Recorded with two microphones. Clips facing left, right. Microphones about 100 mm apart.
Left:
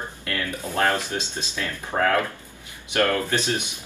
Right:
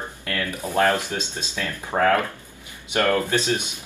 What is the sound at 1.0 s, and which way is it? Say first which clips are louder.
Speech: even; 20° left (ahead or behind).